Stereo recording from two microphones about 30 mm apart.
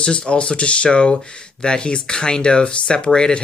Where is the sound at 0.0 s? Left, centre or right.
Left.